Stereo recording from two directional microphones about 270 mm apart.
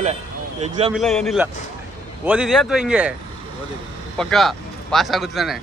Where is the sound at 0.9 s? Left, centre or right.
Centre.